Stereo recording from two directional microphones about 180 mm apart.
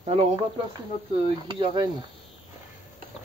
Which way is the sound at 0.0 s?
35° right (ahead or behind).